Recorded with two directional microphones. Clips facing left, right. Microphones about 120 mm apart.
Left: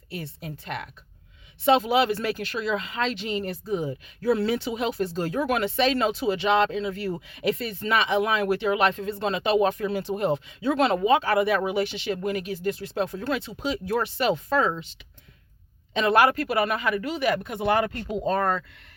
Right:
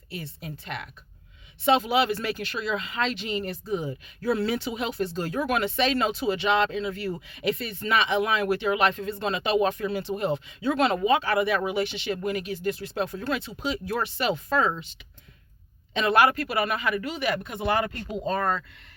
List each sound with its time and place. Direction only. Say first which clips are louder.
0.1 s speech: left 2 dB; 50° left (ahead or behind)
10.6 s speech: left 1 dB; 30° left (ahead or behind)
16.0 s speech: left 1 dB; 40° left (ahead or behind)